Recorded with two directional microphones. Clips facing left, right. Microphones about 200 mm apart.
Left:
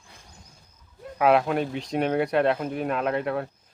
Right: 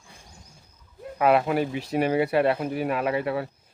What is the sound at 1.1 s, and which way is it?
Speech, centre (ahead or behind).